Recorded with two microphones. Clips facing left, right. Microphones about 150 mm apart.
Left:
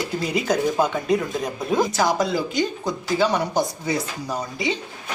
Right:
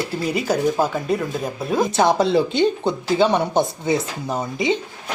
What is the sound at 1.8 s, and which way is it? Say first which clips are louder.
Speech: right 6 dB; 25° right (ahead or behind).